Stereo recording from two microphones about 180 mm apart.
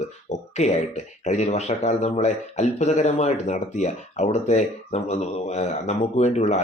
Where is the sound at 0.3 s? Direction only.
40° left (ahead or behind).